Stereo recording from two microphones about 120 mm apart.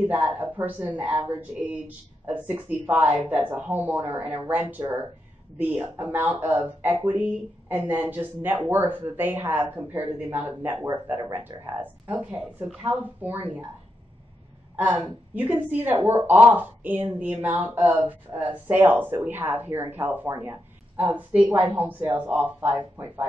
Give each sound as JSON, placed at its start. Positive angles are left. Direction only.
{"t": 0.1, "sound": "speech", "side_deg": -15}
{"t": 14.8, "sound": "speech", "side_deg": -15}